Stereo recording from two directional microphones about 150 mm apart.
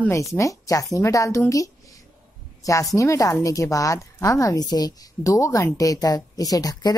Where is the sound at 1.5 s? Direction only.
20° left (ahead or behind).